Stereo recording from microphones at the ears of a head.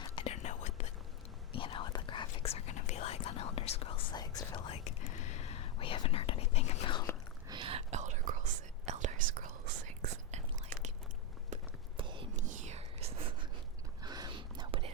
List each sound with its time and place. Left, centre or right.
0.0 s whispering: left
7.5 s whispering: right
12.1 s whispering: right